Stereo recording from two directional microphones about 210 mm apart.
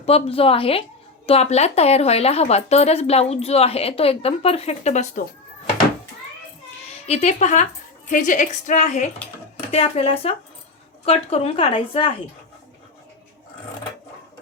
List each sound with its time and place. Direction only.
0.0 s speech: 25° left (ahead or behind)
7.1 s a woman's voice: 30° left (ahead or behind)